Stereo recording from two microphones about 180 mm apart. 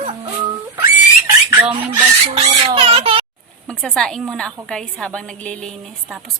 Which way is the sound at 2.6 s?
30° right (ahead or behind).